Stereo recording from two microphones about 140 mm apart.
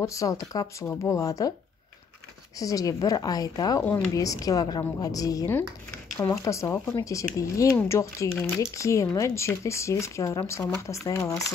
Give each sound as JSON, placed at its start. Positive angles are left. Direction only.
{"t": 0.0, "sound": "speech", "side_deg": 25}
{"t": 2.6, "sound": "speech", "side_deg": 25}